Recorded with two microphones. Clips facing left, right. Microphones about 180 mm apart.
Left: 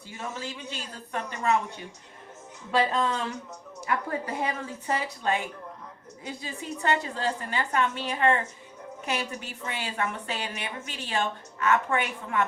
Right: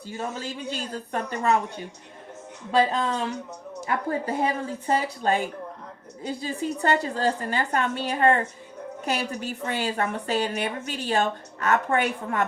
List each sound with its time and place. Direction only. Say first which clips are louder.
0.2 s a woman's voice: right 4 dB; 35° right (ahead or behind)
2.7 s a woman's voice: right 3 dB; 25° right (ahead or behind)